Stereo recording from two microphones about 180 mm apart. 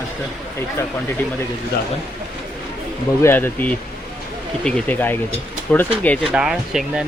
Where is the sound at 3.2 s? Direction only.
10° left (ahead or behind).